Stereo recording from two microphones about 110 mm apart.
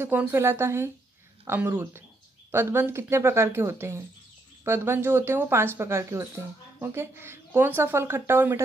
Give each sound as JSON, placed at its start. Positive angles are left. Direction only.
{"t": 0.0, "sound": "speech", "side_deg": -20}